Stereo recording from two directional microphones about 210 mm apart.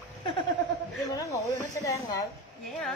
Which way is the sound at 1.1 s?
15° left (ahead or behind).